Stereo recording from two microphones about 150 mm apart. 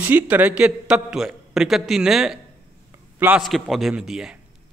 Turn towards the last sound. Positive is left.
turn(degrees=-5)  # may be behind; listen again after turning